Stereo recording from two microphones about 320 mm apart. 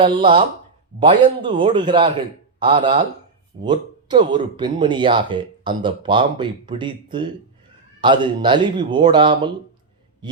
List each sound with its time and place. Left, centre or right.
0.0 s speech: centre